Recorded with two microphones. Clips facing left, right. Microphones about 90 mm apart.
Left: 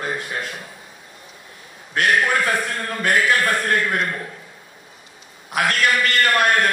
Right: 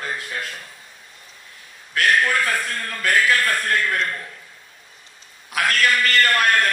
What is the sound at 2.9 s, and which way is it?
A man's voice, 30° left (ahead or behind).